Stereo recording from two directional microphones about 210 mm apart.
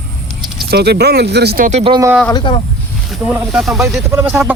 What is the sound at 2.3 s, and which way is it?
Speech, 20° left (ahead or behind).